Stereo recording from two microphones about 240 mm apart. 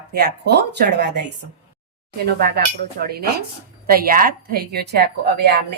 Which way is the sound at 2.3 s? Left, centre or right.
Right.